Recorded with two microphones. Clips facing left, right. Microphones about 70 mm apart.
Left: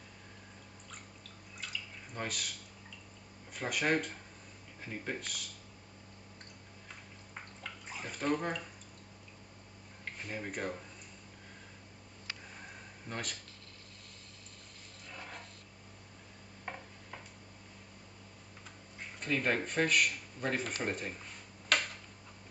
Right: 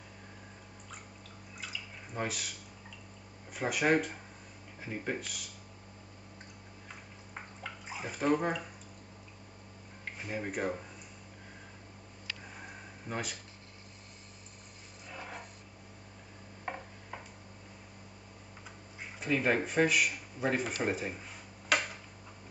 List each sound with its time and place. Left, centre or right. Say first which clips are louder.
1.6 s drip: even; centre
3.5 s speech: right 4 dB; centre
7.3 s bathtub: right 3 dB; centre
10.0 s speech: right 3 dB; centre
12.5 s a sound: right 3 dB; centre
15.0 s a sound: right 3 dB; centre
16.6 s a sound: right 4 dB; centre
19.1 s speech: right 3 dB; centre
21.6 s tick-tock: right 2 dB; centre